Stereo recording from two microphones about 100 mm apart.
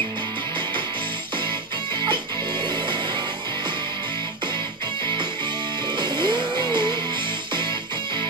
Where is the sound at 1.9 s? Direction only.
50° right (ahead or behind).